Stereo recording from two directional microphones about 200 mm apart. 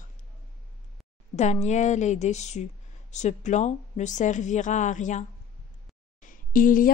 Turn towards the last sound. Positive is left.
turn(degrees=45)  # may be behind; listen again after turning